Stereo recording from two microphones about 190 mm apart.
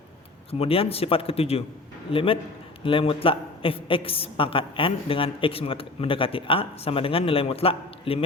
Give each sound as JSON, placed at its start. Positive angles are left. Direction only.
{"t": 0.6, "sound": "a man's voice", "side_deg": 30}